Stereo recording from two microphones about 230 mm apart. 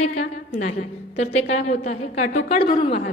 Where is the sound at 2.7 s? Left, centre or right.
Left.